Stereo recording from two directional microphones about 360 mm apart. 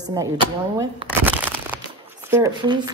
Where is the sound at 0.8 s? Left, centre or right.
Centre.